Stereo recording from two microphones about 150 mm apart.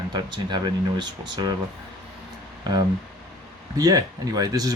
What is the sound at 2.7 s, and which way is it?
Speech, 30° right (ahead or behind).